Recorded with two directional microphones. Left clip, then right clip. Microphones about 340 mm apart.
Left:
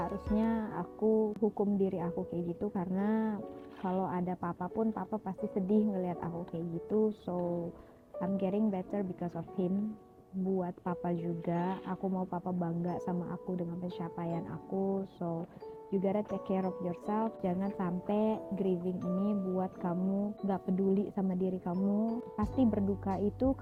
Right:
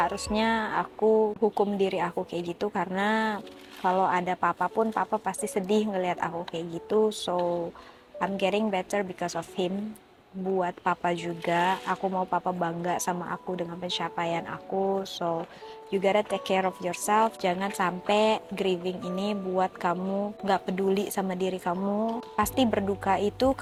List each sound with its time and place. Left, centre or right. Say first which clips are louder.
0.0 s a woman's voice: right 9 dB; centre
1.0 s speech: right 7 dB; centre
1.8 s a woman's voice: right 7 dB; centre